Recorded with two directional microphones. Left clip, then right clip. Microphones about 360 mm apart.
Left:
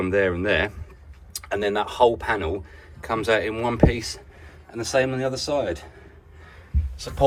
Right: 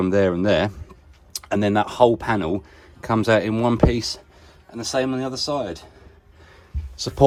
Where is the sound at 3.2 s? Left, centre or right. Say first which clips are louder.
Right 3 dB; centre.